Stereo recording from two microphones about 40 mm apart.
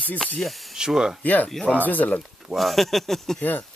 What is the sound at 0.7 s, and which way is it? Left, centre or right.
Speech, centre.